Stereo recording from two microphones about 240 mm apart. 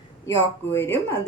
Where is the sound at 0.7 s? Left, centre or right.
Centre.